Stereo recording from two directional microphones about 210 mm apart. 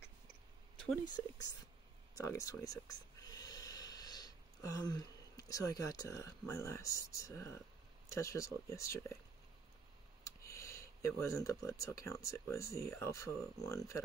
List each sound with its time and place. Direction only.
1.0 s speech: 20° left (ahead or behind)
3.3 s a sound: 20° left (ahead or behind)
8.1 s speech: 15° left (ahead or behind)
10.2 s speech: 15° left (ahead or behind)